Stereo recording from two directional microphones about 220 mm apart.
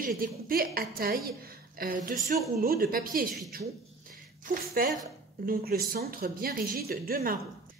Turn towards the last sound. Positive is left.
turn(degrees=-40)  # may be behind; listen again after turning